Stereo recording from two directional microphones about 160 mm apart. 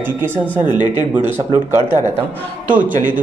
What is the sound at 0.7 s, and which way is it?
Speech, 25° left (ahead or behind).